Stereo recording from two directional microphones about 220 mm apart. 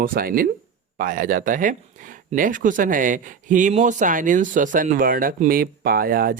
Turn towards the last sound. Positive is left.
turn(degrees=-40)  # may be behind; listen again after turning